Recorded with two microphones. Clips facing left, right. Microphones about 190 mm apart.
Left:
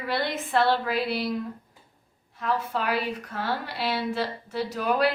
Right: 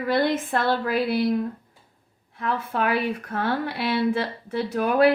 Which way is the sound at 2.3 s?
60° right (ahead or behind).